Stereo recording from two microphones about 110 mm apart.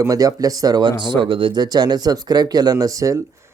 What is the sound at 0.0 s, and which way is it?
Speech, 30° right (ahead or behind).